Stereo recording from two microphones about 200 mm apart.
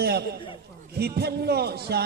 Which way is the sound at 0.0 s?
55° right (ahead or behind).